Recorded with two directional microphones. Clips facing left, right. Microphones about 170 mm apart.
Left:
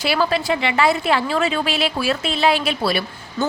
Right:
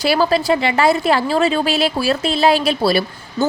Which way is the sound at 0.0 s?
40° right (ahead or behind).